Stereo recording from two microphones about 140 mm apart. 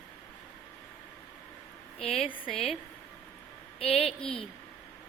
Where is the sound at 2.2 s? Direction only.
40° left (ahead or behind).